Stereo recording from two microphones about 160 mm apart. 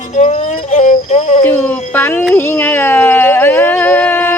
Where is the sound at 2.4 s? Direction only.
15° left (ahead or behind).